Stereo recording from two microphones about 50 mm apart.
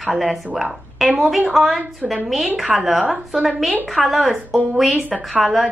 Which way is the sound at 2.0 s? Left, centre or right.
Right.